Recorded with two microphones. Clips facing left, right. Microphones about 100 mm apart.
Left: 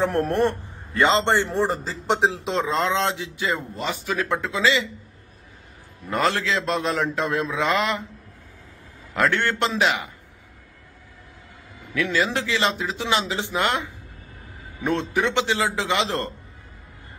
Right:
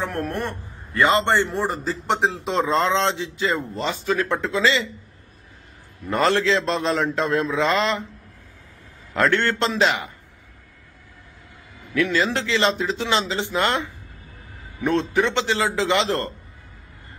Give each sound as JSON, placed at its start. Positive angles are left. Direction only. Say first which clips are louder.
{"t": 0.0, "sound": "a man's voice", "louder": "left 6 dB", "side_deg": 30}
{"t": 2.4, "sound": "a man's voice", "louder": "right 2 dB", "side_deg": 0}
{"t": 6.0, "sound": "a man's voice", "louder": "right 3 dB", "side_deg": 5}
{"t": 9.1, "sound": "a man's voice", "louder": "right 2 dB", "side_deg": 10}
{"t": 11.9, "sound": "a man's voice", "louder": "right 2 dB", "side_deg": 15}